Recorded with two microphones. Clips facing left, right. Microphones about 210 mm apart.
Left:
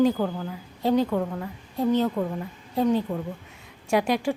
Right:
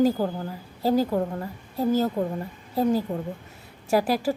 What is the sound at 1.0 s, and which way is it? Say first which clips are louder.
Speech: right 1 dB; 35° right (ahead or behind).